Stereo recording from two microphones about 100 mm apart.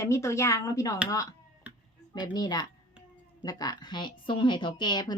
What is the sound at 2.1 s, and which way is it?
A woman's voice, 45° left (ahead or behind).